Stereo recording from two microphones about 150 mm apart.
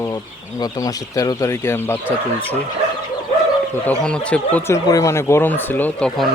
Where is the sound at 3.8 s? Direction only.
5° left (ahead or behind).